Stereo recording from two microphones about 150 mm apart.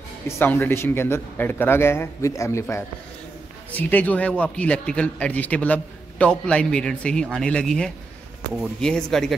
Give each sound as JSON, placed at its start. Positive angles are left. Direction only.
{"t": 0.3, "sound": "a man's voice", "side_deg": 15}